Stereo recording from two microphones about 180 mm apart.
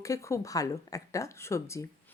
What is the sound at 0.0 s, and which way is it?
Speech, 15° left (ahead or behind).